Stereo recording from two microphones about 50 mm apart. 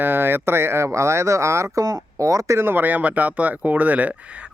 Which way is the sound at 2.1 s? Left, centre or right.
Right.